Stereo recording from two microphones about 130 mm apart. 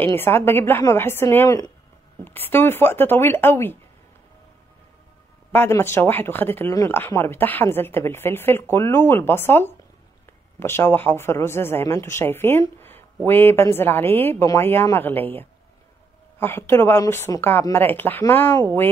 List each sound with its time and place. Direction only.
0.0 s a woman's voice: 15° left (ahead or behind)
5.5 s a woman's voice: 20° left (ahead or behind)